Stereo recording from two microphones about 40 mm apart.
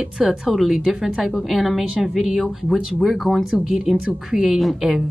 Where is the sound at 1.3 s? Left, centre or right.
Centre.